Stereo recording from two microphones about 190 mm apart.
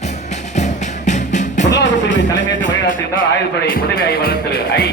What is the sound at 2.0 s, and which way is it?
Music, 75° left (ahead or behind).